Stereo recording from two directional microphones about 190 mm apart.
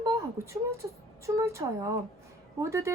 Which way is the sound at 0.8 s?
20° right (ahead or behind).